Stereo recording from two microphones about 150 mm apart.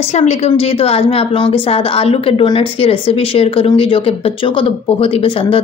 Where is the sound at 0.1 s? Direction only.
45° left (ahead or behind).